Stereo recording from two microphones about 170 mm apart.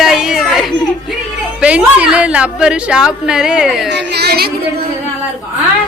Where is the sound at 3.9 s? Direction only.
90° right; by 4.5 s 70° right (ahead or behind).